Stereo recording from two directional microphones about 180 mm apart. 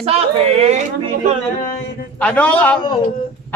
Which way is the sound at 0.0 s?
35° right (ahead or behind).